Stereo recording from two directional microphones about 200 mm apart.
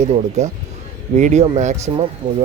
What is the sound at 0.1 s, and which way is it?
Speech, 35° right (ahead or behind).